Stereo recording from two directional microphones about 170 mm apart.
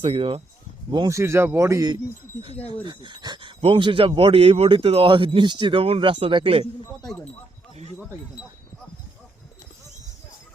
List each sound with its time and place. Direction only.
0.0 s speech: 30° right (ahead or behind)
0.9 s speech: 25° right (ahead or behind)
2.5 s speech: 35° left (ahead or behind)
2.8 s speech: 25° right (ahead or behind)